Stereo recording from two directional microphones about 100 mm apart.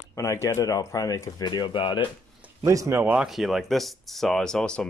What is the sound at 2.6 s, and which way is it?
Speech, 35° right (ahead or behind).